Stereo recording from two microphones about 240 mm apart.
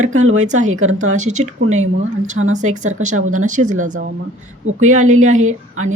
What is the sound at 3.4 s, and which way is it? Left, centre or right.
Speech, right.